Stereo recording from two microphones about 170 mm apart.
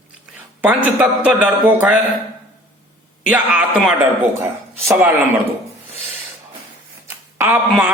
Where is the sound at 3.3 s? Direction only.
10° right (ahead or behind).